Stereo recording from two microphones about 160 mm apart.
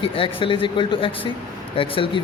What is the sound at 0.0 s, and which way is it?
Speech, 35° left (ahead or behind).